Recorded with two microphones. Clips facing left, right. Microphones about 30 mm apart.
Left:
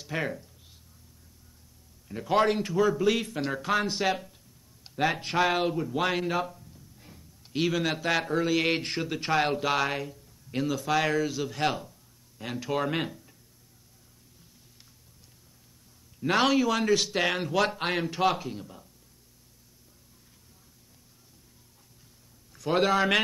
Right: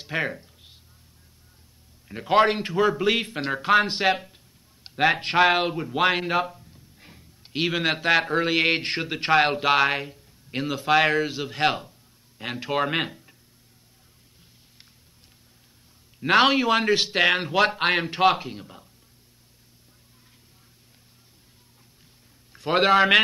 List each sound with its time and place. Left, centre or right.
0.0 s a sound: right
2.0 s a man's voice: right
16.2 s speech: right
22.5 s a man's voice: right